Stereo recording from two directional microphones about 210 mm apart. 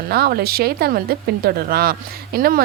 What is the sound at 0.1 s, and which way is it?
Speech, 45° right (ahead or behind).